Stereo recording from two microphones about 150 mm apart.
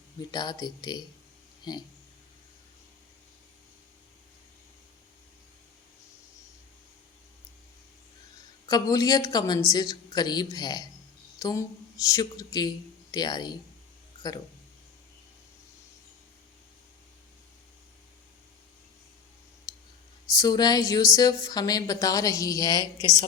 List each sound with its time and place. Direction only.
0.2 s speech: 25° left (ahead or behind)
8.6 s speech: 25° left (ahead or behind)
20.4 s speech: 25° left (ahead or behind)